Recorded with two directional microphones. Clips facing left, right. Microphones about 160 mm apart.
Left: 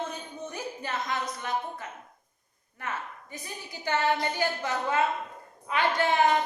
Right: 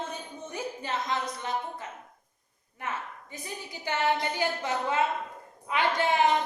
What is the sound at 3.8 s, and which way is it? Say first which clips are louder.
A woman's voice: left 1 dB; 20° right (ahead or behind).